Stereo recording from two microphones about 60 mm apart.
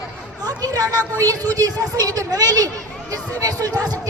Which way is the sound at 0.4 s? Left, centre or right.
Right.